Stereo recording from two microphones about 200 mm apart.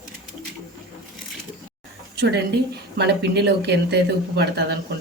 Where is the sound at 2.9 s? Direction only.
55° right (ahead or behind).